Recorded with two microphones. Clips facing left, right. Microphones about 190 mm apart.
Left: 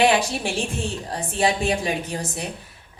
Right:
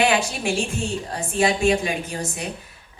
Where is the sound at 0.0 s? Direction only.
35° left (ahead or behind).